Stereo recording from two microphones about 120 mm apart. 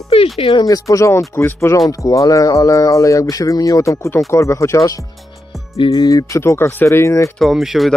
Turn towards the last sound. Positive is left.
turn(degrees=0)  # may be behind; listen again after turning